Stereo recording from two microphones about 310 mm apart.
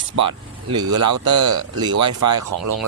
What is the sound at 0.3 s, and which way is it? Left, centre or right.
Speech, centre.